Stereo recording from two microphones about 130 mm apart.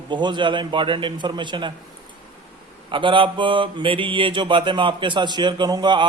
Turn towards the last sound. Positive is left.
turn(degrees=-35)  # may be behind; listen again after turning